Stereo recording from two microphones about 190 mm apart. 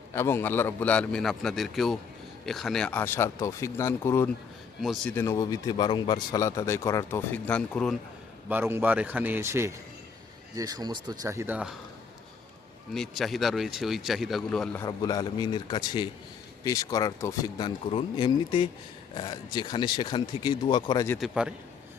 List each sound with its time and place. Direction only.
0.1 s speech: 15° left (ahead or behind)
4.8 s speech: centre (ahead or behind)
5.1 s speech: 15° left (ahead or behind)
7.4 s speech: 5° left (ahead or behind)
8.4 s a man's voice: 10° right (ahead or behind)
12.9 s speech: centre (ahead or behind)
14.8 s speech: 20° left (ahead or behind)
21.2 s speech: 5° right (ahead or behind)